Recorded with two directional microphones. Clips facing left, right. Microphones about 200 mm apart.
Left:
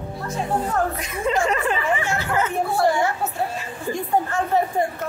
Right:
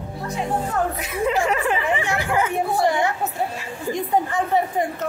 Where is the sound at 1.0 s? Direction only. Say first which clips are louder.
Right 1 dB; 10° right (ahead or behind).